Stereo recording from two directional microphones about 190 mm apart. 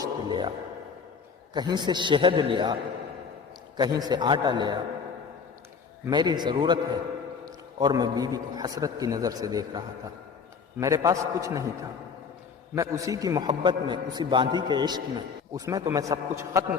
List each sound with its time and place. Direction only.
0.0 s a sound: 25° right (ahead or behind)
1.5 s a man's voice: 25° right (ahead or behind)
3.8 s a man's voice: 20° right (ahead or behind)
6.1 s a man's voice: 25° right (ahead or behind)